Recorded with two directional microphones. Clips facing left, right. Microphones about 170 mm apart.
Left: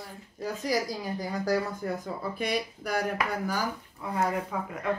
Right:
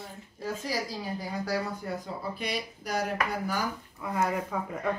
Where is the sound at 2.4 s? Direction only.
50° left (ahead or behind).